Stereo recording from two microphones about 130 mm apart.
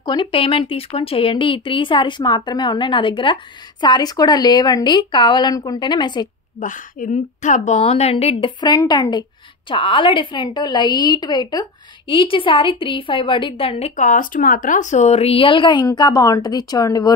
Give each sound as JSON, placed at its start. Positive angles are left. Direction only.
{"t": 0.0, "sound": "a woman's voice", "side_deg": 35}
{"t": 6.6, "sound": "a woman's voice", "side_deg": 80}
{"t": 12.1, "sound": "a woman's voice", "side_deg": 40}